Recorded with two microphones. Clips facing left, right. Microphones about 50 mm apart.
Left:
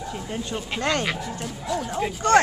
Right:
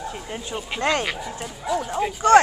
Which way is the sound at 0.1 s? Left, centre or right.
Centre.